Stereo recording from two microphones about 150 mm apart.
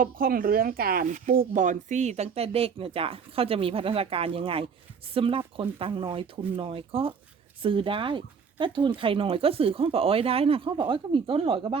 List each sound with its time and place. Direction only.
0.0 s speech: 70° right (ahead or behind); by 11.8 s 35° right (ahead or behind)